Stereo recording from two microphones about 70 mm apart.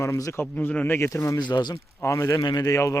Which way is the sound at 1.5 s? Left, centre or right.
Left.